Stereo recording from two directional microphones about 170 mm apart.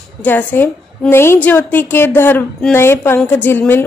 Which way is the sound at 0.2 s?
10° left (ahead or behind).